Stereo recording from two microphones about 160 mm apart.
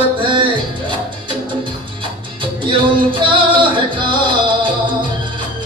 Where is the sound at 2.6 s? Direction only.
30° right (ahead or behind).